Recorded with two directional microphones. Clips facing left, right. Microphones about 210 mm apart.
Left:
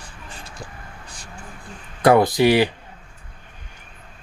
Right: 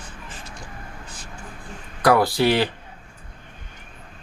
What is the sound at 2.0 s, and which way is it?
Speech, 20° left (ahead or behind).